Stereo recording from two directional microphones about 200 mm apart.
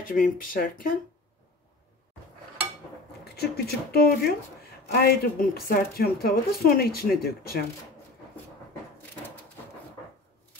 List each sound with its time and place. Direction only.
0.0 s speech: 45° left (ahead or behind)
3.3 s speech: 50° left (ahead or behind)